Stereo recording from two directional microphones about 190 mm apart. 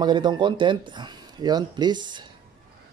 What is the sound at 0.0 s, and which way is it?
Speech, 25° right (ahead or behind).